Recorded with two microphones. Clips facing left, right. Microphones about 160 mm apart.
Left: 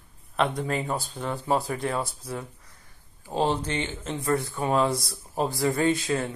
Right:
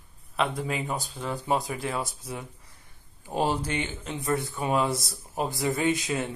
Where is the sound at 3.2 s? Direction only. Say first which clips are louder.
Left 1 dB; 10° right (ahead or behind).